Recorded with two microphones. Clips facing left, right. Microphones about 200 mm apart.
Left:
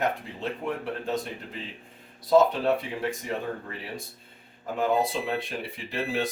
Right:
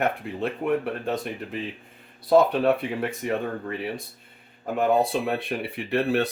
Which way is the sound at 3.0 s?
60° right (ahead or behind).